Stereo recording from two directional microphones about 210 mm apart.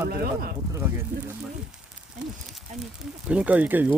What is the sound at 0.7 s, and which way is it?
Speech, 10° right (ahead or behind).